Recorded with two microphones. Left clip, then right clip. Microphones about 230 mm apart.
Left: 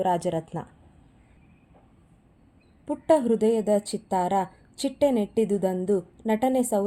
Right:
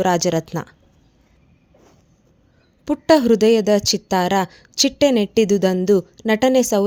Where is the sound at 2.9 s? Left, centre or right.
Right.